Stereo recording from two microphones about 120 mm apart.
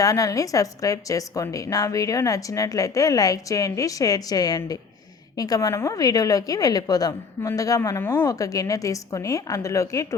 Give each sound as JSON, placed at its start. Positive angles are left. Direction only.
{"t": 0.0, "sound": "a woman's voice", "side_deg": 30}
{"t": 7.8, "sound": "a woman's voice", "side_deg": 20}